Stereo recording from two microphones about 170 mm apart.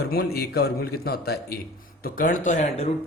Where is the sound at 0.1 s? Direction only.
65° left (ahead or behind).